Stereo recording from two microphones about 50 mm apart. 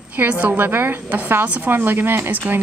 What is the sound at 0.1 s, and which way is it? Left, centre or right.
A woman's voice, right.